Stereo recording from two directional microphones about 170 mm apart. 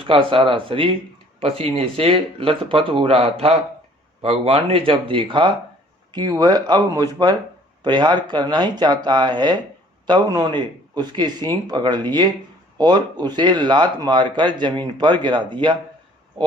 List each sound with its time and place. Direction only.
0.0 s speech: 30° right (ahead or behind)